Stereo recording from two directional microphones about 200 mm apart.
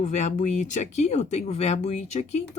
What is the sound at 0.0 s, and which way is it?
Speech, 35° left (ahead or behind).